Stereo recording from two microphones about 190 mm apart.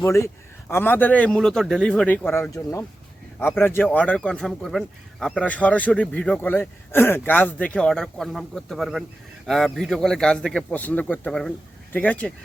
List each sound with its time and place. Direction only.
0.0 s a man's voice: 15° left (ahead or behind)